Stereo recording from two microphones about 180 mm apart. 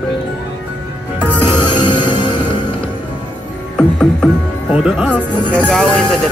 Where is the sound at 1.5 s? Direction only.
25° left (ahead or behind).